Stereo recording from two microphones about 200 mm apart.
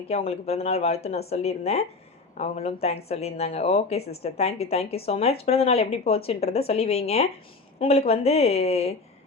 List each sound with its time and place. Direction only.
0.1 s speech: 30° left (ahead or behind)